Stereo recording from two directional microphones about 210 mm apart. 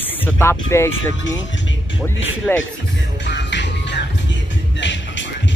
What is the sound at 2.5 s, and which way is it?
Speech, 10° left (ahead or behind).